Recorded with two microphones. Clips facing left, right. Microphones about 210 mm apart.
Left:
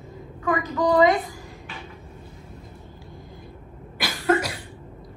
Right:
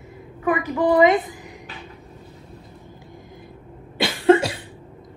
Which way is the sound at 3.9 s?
25° right (ahead or behind).